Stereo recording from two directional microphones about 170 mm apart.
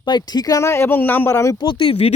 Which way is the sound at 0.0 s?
25° left (ahead or behind).